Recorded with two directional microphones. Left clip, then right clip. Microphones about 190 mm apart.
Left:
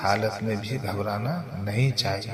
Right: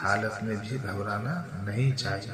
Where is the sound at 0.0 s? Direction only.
35° left (ahead or behind).